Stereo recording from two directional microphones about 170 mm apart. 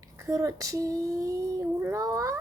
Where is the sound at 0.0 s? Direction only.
20° right (ahead or behind).